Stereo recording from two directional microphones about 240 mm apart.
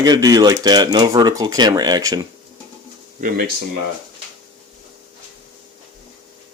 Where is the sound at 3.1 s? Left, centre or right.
Right.